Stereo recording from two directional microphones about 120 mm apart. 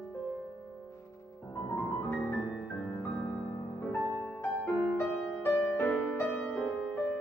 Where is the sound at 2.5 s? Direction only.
5° left (ahead or behind).